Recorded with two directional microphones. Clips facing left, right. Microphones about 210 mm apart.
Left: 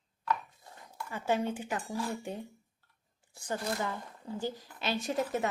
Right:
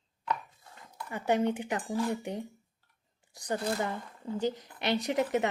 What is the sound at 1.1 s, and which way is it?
A woman's voice, 15° right (ahead or behind).